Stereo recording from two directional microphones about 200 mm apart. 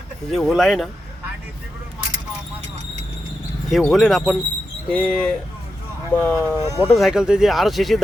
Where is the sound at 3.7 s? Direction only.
Centre (ahead or behind).